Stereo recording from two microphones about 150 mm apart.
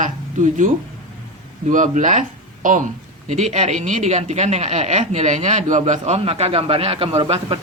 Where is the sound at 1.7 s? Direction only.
55° right (ahead or behind).